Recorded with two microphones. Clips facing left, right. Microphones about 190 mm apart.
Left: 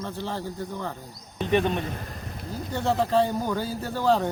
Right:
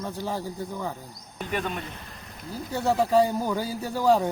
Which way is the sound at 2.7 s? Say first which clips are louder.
Right 1 dB; 10° right (ahead or behind).